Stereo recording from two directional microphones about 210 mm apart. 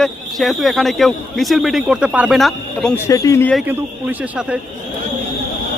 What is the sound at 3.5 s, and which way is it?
Speech, 10° right (ahead or behind).